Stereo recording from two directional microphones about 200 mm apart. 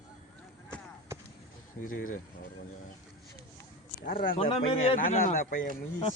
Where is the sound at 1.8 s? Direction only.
45° left (ahead or behind).